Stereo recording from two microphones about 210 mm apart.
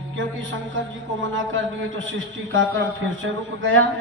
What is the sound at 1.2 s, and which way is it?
A man's voice, 65° right (ahead or behind).